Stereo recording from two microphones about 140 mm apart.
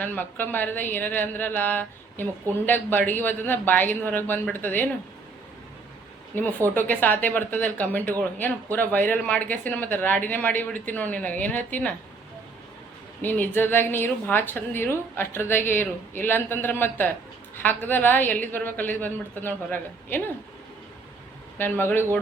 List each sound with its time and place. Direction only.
0.0 s a woman's voice: 10° left (ahead or behind)
6.7 s a woman's voice: 15° left (ahead or behind)
13.2 s a woman's voice: 15° left (ahead or behind)
21.6 s a woman's voice: 15° left (ahead or behind)